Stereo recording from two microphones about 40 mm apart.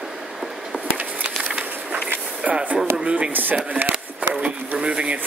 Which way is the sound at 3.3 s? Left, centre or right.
Right.